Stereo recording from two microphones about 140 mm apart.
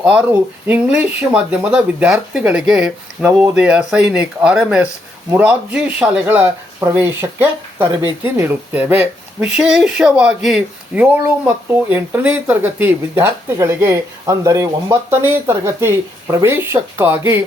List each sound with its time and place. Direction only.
0.0 s speech: 10° right (ahead or behind)